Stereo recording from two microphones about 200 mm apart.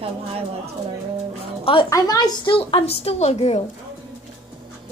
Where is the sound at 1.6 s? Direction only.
25° left (ahead or behind).